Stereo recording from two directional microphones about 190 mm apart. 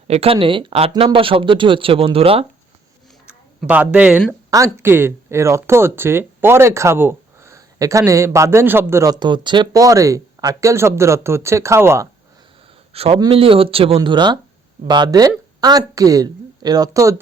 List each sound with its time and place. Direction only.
0.1 s speech: 30° right (ahead or behind)
3.7 s speech: 5° right (ahead or behind)
12.9 s a man's voice: 30° right (ahead or behind)